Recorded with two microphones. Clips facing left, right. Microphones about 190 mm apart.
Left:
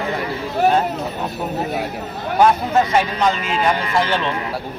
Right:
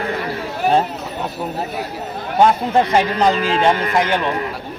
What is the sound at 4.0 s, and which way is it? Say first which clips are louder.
Speech: right 1 dB; 15° right (ahead or behind).